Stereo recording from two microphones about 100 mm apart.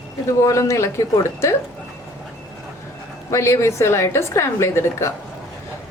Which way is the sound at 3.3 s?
30° left (ahead or behind).